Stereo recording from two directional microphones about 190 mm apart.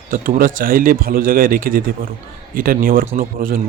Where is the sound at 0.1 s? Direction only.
50° right (ahead or behind).